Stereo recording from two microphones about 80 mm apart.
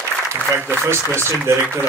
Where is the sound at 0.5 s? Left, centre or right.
Right.